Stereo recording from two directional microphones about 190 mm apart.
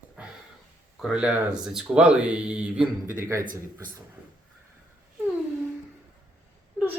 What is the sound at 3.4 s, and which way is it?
Speech, 45° right (ahead or behind).